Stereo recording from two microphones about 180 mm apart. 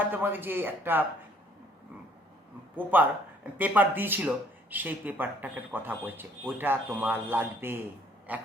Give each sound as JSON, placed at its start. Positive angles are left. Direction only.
{"t": 0.1, "sound": "speech", "side_deg": -10}
{"t": 2.7, "sound": "speech", "side_deg": -10}